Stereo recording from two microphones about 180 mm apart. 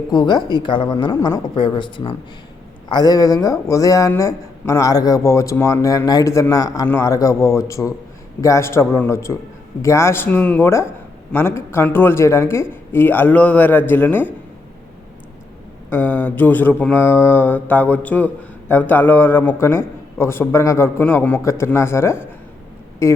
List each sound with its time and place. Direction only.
0.1 s a man's voice: 20° left (ahead or behind)
15.9 s a man's voice: 10° left (ahead or behind)